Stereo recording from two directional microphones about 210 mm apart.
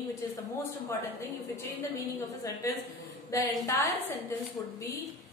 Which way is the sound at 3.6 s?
15° left (ahead or behind).